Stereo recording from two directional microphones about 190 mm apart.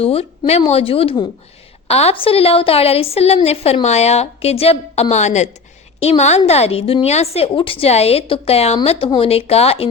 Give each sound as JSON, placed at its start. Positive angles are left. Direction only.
{"t": 0.0, "sound": "a woman's voice", "side_deg": 30}